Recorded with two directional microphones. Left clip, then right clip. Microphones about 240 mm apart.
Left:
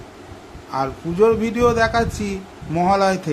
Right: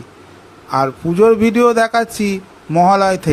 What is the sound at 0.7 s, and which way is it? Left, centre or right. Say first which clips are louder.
Speech: right 7 dB; right.